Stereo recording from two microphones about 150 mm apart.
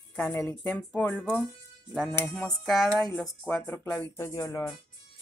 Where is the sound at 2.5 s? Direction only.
Centre (ahead or behind); by 4.7 s 25° left (ahead or behind).